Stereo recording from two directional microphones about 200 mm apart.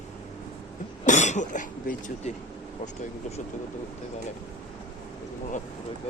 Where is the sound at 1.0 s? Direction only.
35° left (ahead or behind).